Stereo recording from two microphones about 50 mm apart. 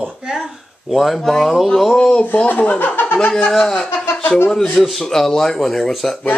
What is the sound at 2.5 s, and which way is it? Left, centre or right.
Speech, left.